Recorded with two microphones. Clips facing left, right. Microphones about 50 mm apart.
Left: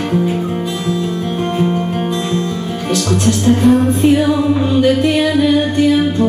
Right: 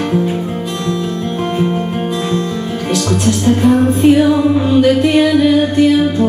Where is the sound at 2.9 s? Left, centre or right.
Centre.